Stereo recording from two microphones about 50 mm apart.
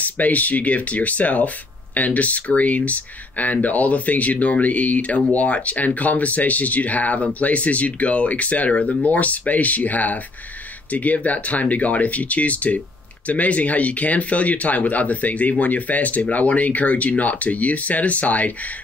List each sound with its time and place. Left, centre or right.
0.0 s speech: left